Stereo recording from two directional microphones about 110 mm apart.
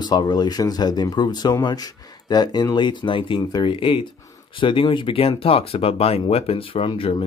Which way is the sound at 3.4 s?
40° left (ahead or behind).